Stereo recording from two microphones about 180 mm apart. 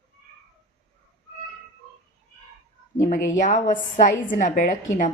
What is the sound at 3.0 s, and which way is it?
A woman's voice, 45° left (ahead or behind).